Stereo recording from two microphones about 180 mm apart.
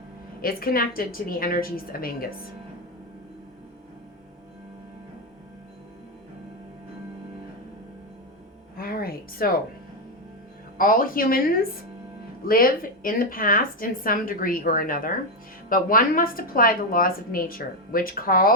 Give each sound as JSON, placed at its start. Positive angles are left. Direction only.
{"t": 0.4, "sound": "a woman's voice", "side_deg": 55}
{"t": 8.7, "sound": "a sound", "side_deg": 55}
{"t": 10.8, "sound": "a woman's voice", "side_deg": 50}